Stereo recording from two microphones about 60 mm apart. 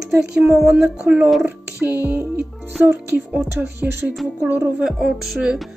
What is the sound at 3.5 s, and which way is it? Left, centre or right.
Speech, right.